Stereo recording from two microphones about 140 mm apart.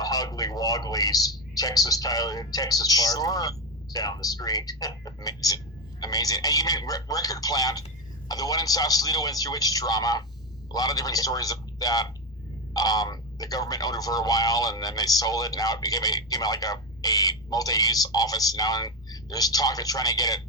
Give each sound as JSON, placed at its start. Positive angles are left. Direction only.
{"t": 0.0, "sound": "speech", "side_deg": 25}